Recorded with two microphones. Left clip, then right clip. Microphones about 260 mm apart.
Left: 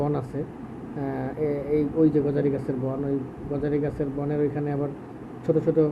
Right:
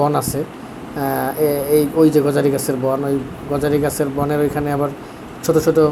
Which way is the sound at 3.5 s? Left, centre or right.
Centre.